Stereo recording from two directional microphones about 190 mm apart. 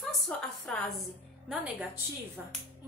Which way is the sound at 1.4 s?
10° right (ahead or behind).